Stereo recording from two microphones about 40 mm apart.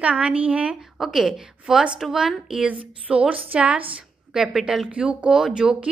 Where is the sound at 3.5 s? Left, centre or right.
Right.